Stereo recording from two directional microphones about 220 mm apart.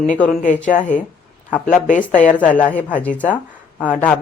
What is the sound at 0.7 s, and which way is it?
Speech, 35° left (ahead or behind).